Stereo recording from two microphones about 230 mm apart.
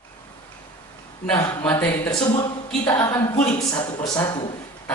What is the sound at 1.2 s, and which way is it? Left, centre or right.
Speech, centre.